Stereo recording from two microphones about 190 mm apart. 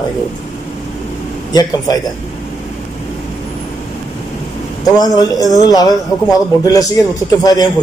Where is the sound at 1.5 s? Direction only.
20° left (ahead or behind).